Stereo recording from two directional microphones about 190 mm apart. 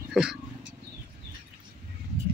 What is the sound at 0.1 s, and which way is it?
Speech, 5° right (ahead or behind).